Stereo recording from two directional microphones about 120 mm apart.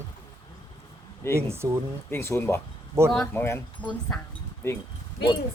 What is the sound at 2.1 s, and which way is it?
Speech, 20° left (ahead or behind).